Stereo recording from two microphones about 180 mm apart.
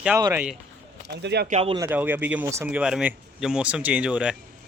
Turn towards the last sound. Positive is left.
turn(degrees=-5)  # may be behind; listen again after turning